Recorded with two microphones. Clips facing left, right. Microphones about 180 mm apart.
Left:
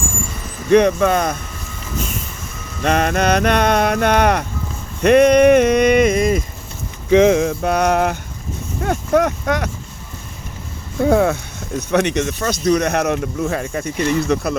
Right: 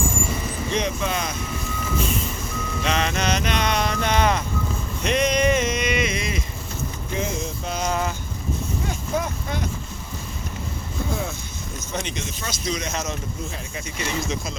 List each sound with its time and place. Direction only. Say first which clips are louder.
0.7 s speech: left 14 dB; 60° left (ahead or behind)
2.8 s speech: left 8 dB; 55° left (ahead or behind)
7.1 s speech: left 17 dB; 85° left; by 8.1 s 65° left (ahead or behind)
8.8 s a sound: left 13 dB; 65° left (ahead or behind)
11.0 s speech: left 15 dB; 70° left (ahead or behind)